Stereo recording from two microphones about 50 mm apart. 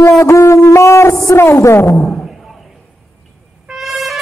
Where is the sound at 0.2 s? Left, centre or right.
Left.